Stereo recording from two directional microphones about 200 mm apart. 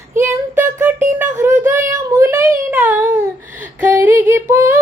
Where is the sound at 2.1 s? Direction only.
15° right (ahead or behind).